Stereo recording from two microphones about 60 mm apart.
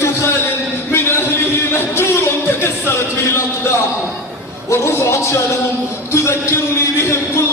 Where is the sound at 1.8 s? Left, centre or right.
Left.